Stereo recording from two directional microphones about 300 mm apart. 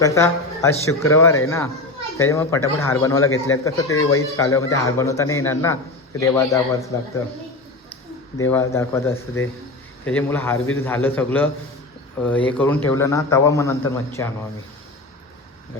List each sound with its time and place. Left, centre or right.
0.0 s a man's voice: centre
3.2 s speech: left
3.6 s a man's voice: centre
8.4 s a man's voice: centre